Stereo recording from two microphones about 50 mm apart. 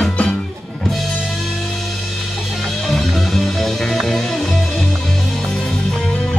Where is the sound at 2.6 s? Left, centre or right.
Centre.